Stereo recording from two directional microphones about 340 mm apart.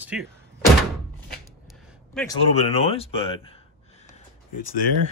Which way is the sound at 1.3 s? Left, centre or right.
Centre.